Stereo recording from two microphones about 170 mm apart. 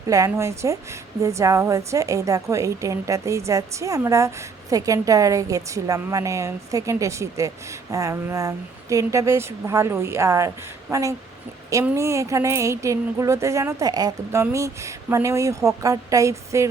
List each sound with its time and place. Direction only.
0.1 s a woman's voice: 20° right (ahead or behind)